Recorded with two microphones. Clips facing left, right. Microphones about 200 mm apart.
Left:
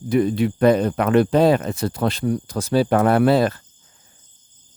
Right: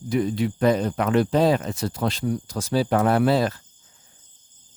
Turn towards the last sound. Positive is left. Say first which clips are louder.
# left 4 dB
turn(degrees=60)  # may be behind; listen again after turning